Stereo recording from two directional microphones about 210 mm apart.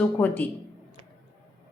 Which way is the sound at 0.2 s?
5° left (ahead or behind).